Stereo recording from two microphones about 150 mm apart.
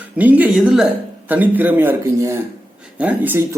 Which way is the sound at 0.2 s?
10° right (ahead or behind).